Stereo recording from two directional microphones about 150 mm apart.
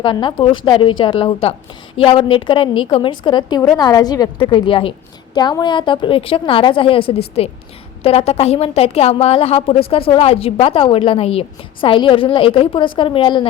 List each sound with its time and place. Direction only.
0.0 s a woman's voice: 30° left (ahead or behind)